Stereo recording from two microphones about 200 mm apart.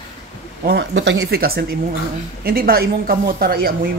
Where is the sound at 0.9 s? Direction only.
65° right (ahead or behind); by 3.7 s 50° right (ahead or behind).